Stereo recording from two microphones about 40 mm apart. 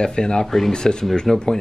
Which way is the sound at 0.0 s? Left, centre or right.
Centre.